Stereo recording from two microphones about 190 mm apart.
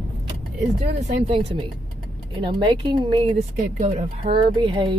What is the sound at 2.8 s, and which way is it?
Speech, 25° right (ahead or behind).